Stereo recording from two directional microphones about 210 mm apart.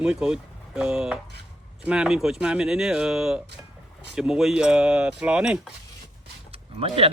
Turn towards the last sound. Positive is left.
turn(degrees=-25)  # may be behind; listen again after turning